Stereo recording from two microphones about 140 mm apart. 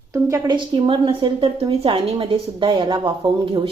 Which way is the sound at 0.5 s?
35° right (ahead or behind).